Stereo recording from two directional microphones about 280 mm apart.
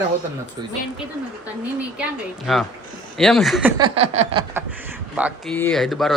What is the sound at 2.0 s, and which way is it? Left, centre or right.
A man's voice, centre.